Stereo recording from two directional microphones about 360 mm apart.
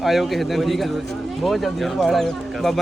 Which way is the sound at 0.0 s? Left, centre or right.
Centre.